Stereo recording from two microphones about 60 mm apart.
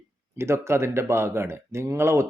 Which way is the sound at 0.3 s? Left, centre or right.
Right.